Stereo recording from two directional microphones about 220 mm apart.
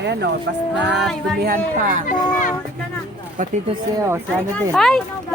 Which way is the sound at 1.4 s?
35° right (ahead or behind).